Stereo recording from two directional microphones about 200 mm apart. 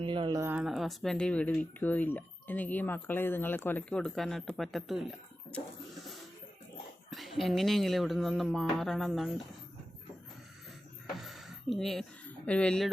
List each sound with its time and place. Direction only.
0.0 s speech: 25° right (ahead or behind)
0.4 s speech: 5° right (ahead or behind)
7.1 s speech: centre (ahead or behind)
11.2 s a sound: centre (ahead or behind)
12.5 s speech: 5° left (ahead or behind)